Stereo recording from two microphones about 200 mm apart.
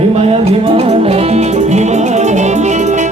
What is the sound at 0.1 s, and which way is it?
Music, 30° right (ahead or behind).